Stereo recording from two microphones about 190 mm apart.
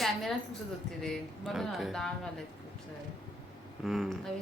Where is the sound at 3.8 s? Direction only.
Centre (ahead or behind).